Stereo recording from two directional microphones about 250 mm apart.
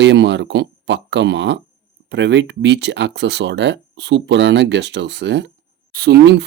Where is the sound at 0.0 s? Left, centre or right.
Right.